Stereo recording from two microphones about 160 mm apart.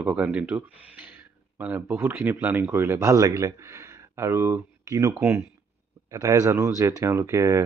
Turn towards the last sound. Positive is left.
turn(degrees=-20)  # may be behind; listen again after turning